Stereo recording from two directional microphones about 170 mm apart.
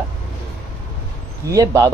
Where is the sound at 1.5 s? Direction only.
20° right (ahead or behind).